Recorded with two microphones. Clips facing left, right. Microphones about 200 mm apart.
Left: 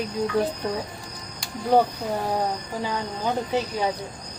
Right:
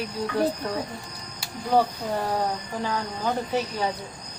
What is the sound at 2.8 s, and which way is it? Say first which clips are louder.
Speech: even; 15° left (ahead or behind).